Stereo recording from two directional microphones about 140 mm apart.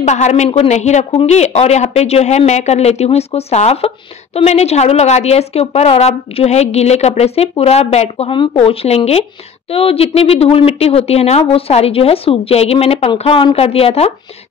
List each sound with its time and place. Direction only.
0.0 s speech: 55° left (ahead or behind)